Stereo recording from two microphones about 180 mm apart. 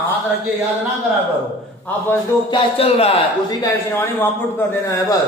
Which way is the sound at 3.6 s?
15° left (ahead or behind).